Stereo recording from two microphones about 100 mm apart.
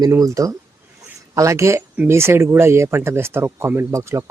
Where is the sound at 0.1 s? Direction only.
35° right (ahead or behind).